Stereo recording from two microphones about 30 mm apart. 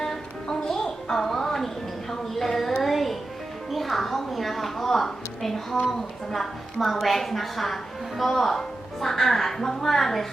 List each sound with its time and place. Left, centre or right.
0.0 s music: centre
1.1 s music: centre
4.3 s a woman's voice: centre